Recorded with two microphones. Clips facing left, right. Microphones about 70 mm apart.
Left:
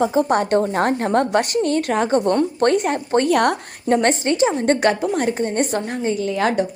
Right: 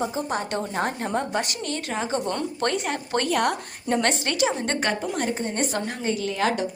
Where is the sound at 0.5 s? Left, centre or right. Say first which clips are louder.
Left 10 dB; left.